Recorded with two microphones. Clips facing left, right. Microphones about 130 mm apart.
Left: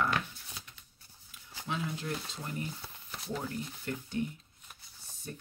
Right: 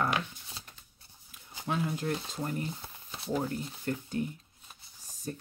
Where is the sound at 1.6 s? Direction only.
45° right (ahead or behind).